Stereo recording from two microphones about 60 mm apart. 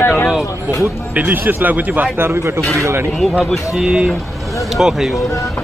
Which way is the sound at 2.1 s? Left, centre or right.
Right.